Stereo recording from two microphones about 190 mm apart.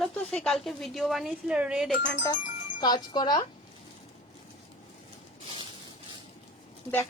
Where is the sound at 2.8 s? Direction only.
20° left (ahead or behind).